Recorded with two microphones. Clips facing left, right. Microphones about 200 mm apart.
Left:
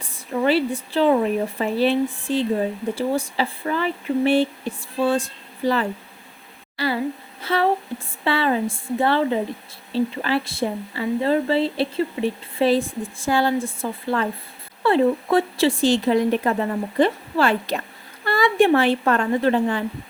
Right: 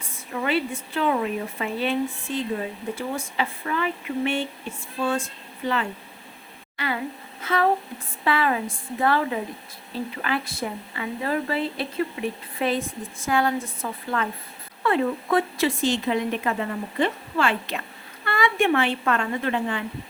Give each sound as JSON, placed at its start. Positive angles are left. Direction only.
{"t": 0.0, "sound": "a woman's voice", "side_deg": 35}
{"t": 6.7, "sound": "a sound", "side_deg": 35}
{"t": 7.4, "sound": "speech", "side_deg": 30}